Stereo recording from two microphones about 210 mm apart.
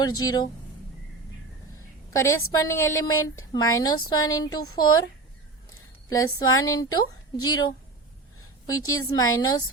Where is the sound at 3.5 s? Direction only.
15° left (ahead or behind).